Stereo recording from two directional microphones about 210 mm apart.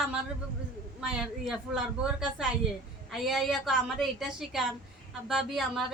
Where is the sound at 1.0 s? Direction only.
5° right (ahead or behind).